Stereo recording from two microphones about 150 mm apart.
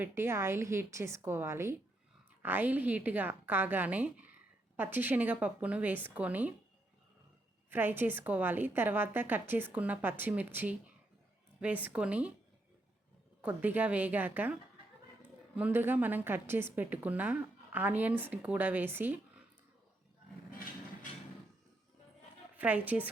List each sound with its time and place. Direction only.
0.0 s a woman's voice: 15° right (ahead or behind)
7.7 s a woman's voice: 15° right (ahead or behind)
13.4 s a woman's voice: 10° right (ahead or behind)
15.5 s a woman's voice: 10° right (ahead or behind)
20.5 s a sound: 75° left (ahead or behind)
22.6 s a woman's voice: 10° right (ahead or behind)